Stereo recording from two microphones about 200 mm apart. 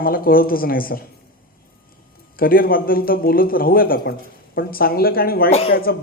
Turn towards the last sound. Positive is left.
turn(degrees=30)  # may be behind; listen again after turning